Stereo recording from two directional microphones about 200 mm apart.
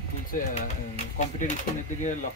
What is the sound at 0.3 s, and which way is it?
Speech, 40° left (ahead or behind).